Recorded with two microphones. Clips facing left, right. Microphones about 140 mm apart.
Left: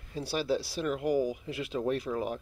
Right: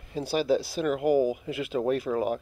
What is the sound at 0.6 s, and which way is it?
Speech, 50° right (ahead or behind).